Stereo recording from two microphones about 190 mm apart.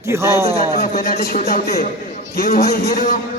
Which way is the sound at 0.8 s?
50° left (ahead or behind).